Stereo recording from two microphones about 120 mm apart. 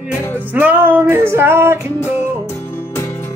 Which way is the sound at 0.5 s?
15° right (ahead or behind).